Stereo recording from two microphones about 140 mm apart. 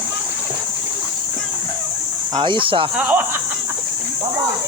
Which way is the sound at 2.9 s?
10° right (ahead or behind).